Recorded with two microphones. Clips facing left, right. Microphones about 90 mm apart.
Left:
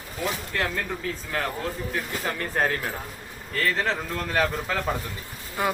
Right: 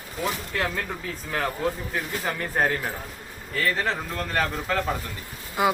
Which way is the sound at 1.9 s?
5° right (ahead or behind).